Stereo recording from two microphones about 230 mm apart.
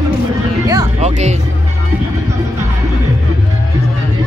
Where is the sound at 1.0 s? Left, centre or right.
Right.